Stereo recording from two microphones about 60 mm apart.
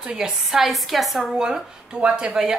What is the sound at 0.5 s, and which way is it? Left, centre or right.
A woman's voice, centre.